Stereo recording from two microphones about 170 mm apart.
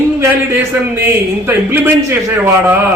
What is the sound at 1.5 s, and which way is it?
A man's voice, 15° right (ahead or behind).